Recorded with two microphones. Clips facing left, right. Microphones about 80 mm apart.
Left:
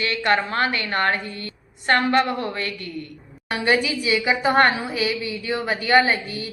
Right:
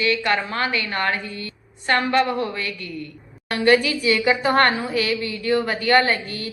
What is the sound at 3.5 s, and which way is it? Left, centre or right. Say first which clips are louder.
A woman's voice: right 3 dB; centre.